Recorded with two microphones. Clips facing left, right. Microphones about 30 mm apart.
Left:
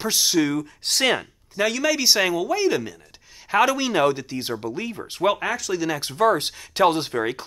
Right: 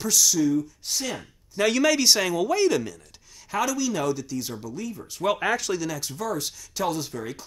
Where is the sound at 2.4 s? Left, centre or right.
Centre.